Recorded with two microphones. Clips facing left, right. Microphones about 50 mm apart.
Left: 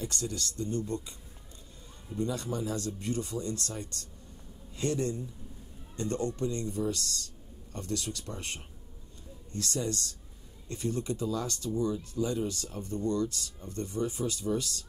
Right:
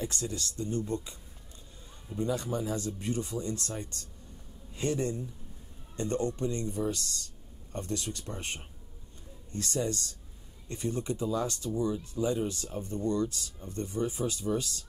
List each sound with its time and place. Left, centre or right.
0.0 s speech: right
2.1 s speech: centre